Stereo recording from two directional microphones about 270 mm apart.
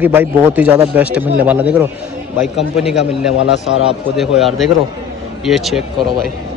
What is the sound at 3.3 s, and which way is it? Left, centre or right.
Speech, left.